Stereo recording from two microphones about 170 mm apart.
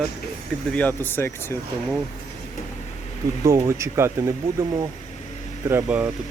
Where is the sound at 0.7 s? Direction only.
10° left (ahead or behind).